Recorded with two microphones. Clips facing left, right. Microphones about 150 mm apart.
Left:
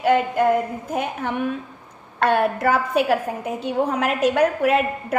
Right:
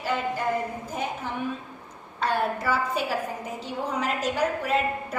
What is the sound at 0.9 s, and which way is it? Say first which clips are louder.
A woman's voice: left 7 dB; 65° left (ahead or behind).